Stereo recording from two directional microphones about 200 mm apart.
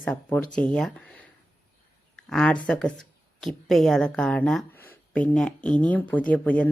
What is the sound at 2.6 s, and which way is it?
Speech, 5° left (ahead or behind).